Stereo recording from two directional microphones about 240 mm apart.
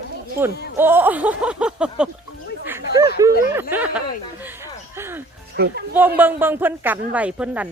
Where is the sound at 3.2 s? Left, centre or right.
Centre.